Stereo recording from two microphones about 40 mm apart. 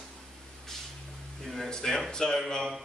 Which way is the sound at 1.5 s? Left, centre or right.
Centre.